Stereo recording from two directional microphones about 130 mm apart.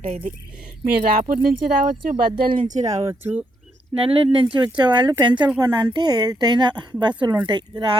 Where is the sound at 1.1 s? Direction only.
90° right.